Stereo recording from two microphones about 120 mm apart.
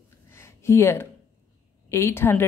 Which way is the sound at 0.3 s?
20° left (ahead or behind).